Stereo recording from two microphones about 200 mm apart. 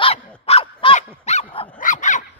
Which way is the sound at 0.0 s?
30° left (ahead or behind).